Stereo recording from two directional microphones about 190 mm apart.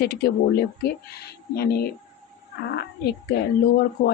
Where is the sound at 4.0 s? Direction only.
50° left (ahead or behind).